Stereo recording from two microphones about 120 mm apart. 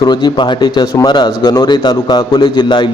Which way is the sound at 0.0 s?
40° left (ahead or behind).